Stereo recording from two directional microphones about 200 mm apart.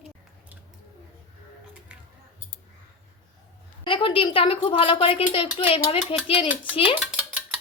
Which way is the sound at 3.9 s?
25° left (ahead or behind).